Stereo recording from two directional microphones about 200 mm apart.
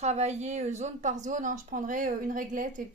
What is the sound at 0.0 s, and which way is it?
A woman's voice, 35° right (ahead or behind).